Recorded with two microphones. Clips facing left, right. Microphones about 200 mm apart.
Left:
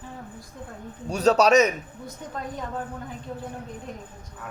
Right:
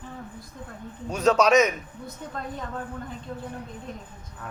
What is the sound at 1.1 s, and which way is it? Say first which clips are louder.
Speech: left 1 dB; 35° left (ahead or behind).